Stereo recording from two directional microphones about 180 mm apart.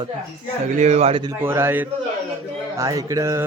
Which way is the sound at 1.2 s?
15° right (ahead or behind).